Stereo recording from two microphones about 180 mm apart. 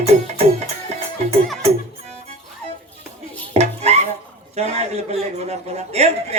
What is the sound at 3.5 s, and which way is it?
Dishes, 35° right (ahead or behind).